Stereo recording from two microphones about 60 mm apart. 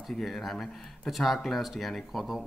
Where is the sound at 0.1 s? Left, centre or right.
Centre.